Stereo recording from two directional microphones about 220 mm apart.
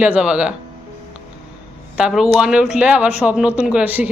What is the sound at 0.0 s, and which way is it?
Speech, 5° right (ahead or behind).